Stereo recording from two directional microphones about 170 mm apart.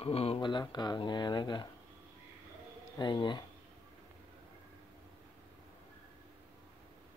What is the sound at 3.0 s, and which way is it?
Speech, 25° left (ahead or behind).